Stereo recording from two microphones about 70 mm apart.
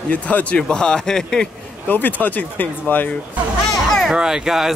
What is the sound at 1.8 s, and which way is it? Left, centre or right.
Speech, left.